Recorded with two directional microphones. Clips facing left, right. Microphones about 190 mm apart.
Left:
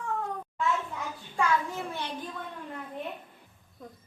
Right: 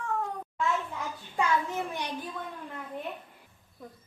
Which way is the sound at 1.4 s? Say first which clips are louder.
Even; 20° right (ahead or behind).